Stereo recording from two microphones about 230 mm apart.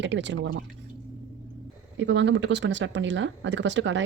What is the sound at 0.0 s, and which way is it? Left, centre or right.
Speech, right.